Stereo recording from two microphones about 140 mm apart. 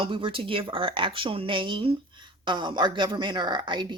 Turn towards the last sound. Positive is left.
turn(degrees=-35)  # may be behind; listen again after turning